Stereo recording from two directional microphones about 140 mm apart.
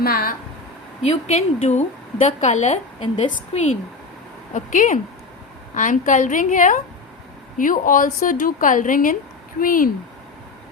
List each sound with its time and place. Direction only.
0.0 s speech: 90° left
1.0 s a woman's voice: 50° left (ahead or behind)
3.0 s a woman's voice: 35° left (ahead or behind)
4.5 s a woman's voice: 65° left (ahead or behind)
9.6 s speech: 80° left